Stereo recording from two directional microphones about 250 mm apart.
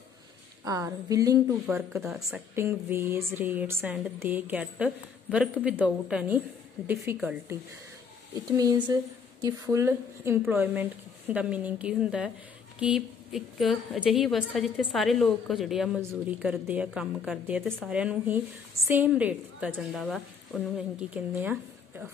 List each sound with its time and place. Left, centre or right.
0.7 s a woman's voice: centre
1.7 s a woman's voice: centre
8.5 s a woman's voice: centre